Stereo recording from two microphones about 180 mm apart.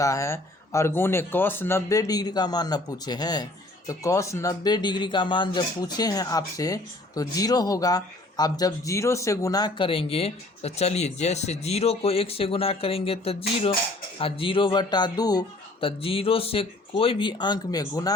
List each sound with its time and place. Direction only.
0.0 s speech: 15° left (ahead or behind)